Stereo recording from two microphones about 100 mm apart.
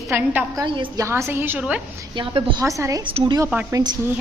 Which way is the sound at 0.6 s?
60° right (ahead or behind).